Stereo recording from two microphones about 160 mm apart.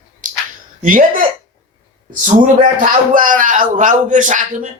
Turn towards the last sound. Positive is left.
turn(degrees=-55)  # may be behind; listen again after turning